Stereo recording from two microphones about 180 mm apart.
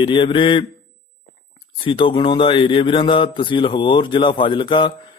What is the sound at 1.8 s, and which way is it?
A man's voice, 30° left (ahead or behind).